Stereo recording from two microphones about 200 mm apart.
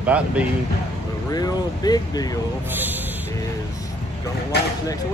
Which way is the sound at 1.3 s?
20° left (ahead or behind).